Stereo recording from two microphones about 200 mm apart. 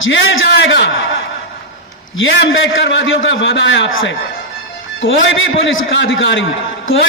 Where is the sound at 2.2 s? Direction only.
80° left.